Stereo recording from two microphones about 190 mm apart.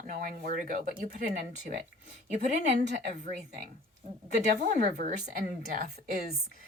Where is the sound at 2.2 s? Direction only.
40° right (ahead or behind).